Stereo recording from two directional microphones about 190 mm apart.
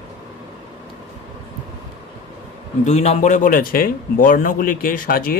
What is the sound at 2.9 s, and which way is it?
A man's voice, 35° left (ahead or behind).